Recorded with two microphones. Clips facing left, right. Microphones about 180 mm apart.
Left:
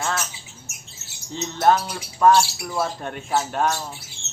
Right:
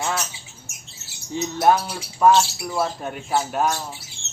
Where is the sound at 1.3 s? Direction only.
10° right (ahead or behind).